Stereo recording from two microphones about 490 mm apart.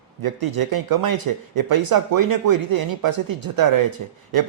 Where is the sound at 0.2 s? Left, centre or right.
Right.